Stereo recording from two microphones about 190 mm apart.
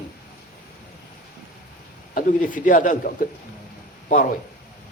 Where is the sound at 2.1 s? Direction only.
45° left (ahead or behind).